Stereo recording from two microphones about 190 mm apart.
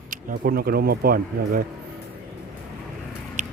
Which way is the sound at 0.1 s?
50° right (ahead or behind).